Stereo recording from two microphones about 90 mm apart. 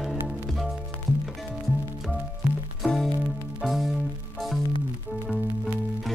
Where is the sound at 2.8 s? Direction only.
5° left (ahead or behind).